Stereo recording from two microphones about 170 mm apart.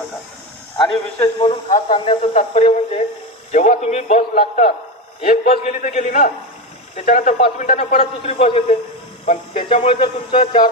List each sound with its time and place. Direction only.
0.8 s a man's voice: 30° left (ahead or behind); by 7.9 s 50° left (ahead or behind)
7.9 s speech: 35° left (ahead or behind)